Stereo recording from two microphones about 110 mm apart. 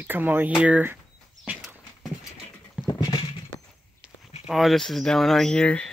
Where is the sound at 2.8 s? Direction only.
40° left (ahead or behind).